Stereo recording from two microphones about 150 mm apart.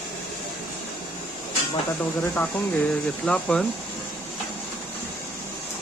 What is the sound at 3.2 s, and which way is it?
Speech, 5° left (ahead or behind).